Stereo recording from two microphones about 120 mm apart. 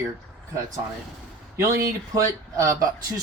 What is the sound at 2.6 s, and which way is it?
Speech, 30° right (ahead or behind).